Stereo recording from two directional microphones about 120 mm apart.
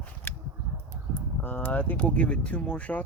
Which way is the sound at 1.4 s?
15° left (ahead or behind).